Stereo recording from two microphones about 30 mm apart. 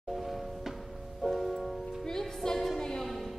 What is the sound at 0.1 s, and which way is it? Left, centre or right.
Music, centre.